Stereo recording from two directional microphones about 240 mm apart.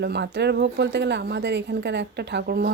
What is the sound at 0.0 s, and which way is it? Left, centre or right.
Speech, right.